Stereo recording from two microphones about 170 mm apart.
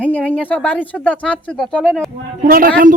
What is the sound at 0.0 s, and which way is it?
Speech, 10° left (ahead or behind).